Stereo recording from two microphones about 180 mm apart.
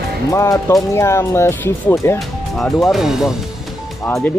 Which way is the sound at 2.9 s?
Centre (ahead or behind).